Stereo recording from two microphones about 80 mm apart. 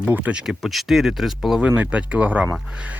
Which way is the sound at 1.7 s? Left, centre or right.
Centre.